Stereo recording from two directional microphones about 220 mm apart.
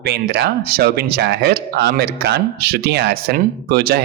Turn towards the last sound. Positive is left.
turn(degrees=-45)  # may be behind; listen again after turning